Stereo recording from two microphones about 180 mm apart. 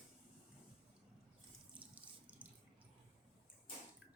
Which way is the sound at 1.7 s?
5° right (ahead or behind).